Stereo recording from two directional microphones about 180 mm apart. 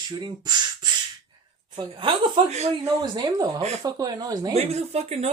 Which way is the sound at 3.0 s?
25° right (ahead or behind).